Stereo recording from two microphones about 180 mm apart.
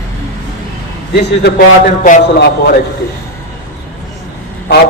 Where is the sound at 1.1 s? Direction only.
65° left (ahead or behind).